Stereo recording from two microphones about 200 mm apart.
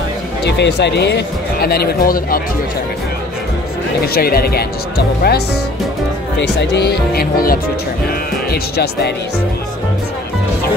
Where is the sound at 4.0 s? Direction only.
50° left (ahead or behind).